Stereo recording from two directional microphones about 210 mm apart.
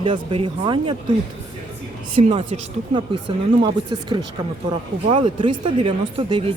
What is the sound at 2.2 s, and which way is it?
Speech, 25° right (ahead or behind).